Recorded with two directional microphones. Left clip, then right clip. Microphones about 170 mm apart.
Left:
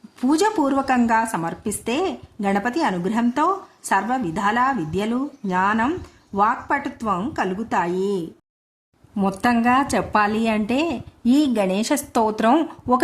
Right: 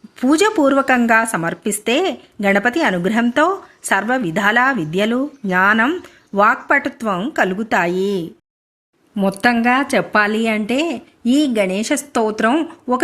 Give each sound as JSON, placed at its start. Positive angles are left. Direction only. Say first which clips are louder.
{"t": 0.2, "sound": "a woman's voice", "louder": "right 5 dB", "side_deg": -15}
{"t": 9.4, "sound": "speech", "louder": "right 3 dB", "side_deg": -5}